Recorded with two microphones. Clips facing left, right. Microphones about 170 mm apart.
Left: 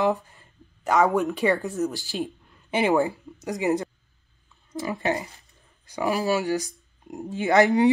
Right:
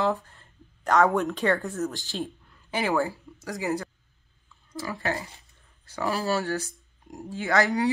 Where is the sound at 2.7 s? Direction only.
20° left (ahead or behind).